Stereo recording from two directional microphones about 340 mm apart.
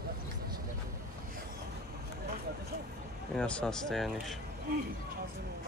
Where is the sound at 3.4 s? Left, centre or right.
Centre.